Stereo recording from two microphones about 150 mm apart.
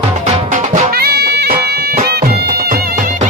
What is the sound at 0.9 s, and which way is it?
Music, 90° right.